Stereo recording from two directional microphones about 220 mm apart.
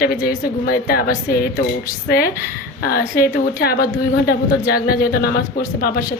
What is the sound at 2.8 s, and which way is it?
Speech, 45° left (ahead or behind).